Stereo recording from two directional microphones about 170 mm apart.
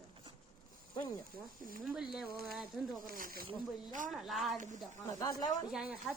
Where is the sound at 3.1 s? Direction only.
55° right (ahead or behind).